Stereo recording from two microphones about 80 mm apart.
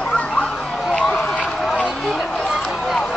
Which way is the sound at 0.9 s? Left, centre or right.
Centre.